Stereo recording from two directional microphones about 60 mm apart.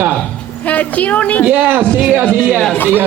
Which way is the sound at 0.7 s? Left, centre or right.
Left.